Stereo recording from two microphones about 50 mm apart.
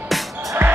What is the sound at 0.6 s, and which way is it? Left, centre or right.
Music, right.